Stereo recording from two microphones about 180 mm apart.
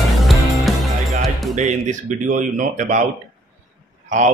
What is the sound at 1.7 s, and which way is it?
Speech, 45° right (ahead or behind).